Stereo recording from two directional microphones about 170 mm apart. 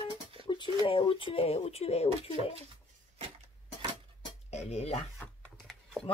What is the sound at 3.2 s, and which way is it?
Music, 40° right (ahead or behind).